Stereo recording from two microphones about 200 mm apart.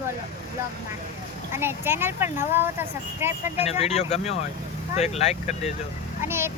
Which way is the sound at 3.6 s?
30° left (ahead or behind).